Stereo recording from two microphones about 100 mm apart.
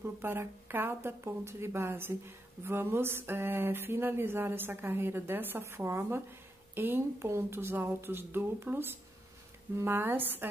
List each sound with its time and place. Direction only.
0.0 s speech: 25° right (ahead or behind)